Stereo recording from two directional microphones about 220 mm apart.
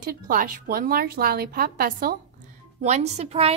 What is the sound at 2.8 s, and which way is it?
Speech, 30° right (ahead or behind).